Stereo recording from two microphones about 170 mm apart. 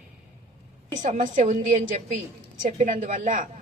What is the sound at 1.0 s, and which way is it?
A woman's voice, 45° right (ahead or behind).